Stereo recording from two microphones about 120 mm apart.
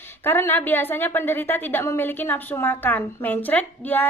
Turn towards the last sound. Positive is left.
turn(degrees=15)  # may be behind; listen again after turning